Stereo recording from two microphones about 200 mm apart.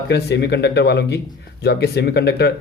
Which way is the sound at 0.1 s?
55° left (ahead or behind).